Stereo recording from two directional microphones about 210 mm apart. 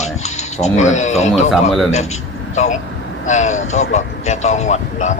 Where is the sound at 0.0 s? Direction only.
35° left (ahead or behind).